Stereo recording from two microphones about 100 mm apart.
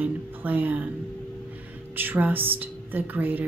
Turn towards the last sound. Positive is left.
turn(degrees=-20)  # may be behind; listen again after turning